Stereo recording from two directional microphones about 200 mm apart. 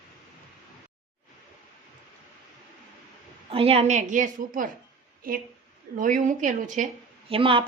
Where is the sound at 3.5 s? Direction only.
30° right (ahead or behind).